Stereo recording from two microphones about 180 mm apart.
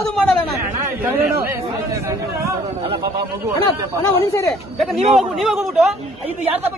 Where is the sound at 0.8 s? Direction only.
10° right (ahead or behind).